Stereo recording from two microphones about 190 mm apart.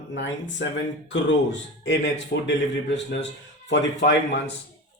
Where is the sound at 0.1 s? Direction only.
70° left (ahead or behind).